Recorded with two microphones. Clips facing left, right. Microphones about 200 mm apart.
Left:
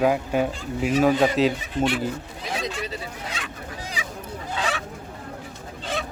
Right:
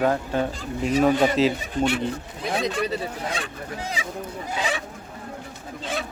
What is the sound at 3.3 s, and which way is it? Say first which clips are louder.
Honk: right 4 dB; 30° right (ahead or behind).